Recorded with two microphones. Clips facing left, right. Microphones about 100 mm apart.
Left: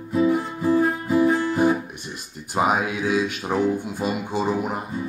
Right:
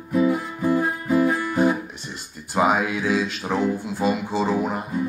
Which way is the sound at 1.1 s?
25° left (ahead or behind).